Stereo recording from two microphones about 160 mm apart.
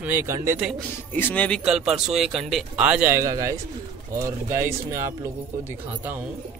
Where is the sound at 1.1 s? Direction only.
10° left (ahead or behind).